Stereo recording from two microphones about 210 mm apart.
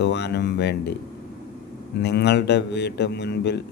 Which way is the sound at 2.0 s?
55° left (ahead or behind).